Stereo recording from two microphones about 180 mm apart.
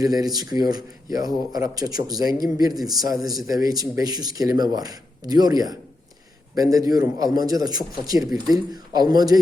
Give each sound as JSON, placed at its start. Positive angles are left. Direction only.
{"t": 0.0, "sound": "speech", "side_deg": -20}
{"t": 3.2, "sound": "speech", "side_deg": 0}
{"t": 3.4, "sound": "speech", "side_deg": -20}